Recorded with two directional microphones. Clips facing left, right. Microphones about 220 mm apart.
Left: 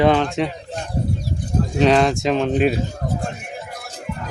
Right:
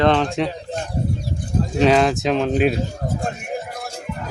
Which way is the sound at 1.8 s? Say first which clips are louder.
Even; centre (ahead or behind).